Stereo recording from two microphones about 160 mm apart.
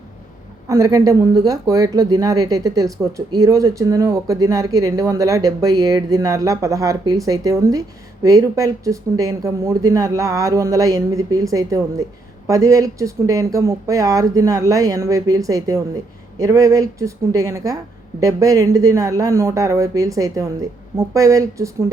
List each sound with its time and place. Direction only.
0.7 s speech: 20° right (ahead or behind)